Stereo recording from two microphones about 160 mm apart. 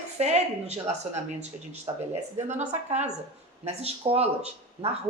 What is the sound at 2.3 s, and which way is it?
Speech, 45° right (ahead or behind).